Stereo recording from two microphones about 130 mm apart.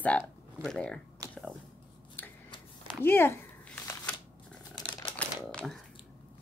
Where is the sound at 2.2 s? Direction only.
15° left (ahead or behind).